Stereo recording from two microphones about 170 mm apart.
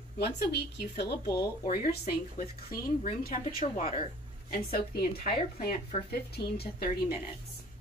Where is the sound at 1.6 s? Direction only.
60° left (ahead or behind).